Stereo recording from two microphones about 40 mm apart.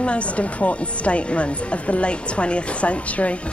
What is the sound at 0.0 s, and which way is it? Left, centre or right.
Speech, left.